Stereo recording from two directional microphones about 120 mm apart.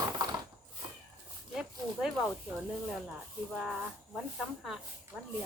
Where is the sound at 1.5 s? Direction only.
5° right (ahead or behind).